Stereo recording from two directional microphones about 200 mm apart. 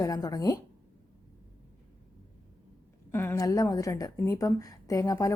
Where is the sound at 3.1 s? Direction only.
10° left (ahead or behind).